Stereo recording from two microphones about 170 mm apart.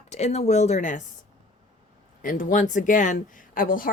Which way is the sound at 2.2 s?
50° left (ahead or behind).